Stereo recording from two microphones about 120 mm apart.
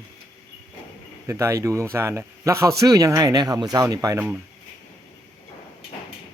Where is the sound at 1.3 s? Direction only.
25° right (ahead or behind).